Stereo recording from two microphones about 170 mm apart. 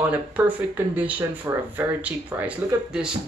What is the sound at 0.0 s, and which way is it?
Speech, 10° right (ahead or behind).